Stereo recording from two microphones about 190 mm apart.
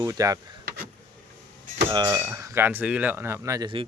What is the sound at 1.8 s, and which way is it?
Cutlery, 20° right (ahead or behind).